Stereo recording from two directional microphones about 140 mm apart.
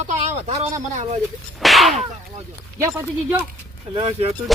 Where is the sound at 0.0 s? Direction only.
50° right (ahead or behind).